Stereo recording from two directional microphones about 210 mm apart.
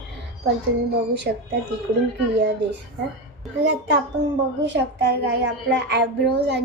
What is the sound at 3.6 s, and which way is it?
A child's voice, 55° right (ahead or behind).